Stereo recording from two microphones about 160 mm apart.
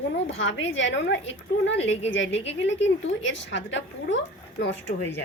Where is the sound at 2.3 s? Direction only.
90° left.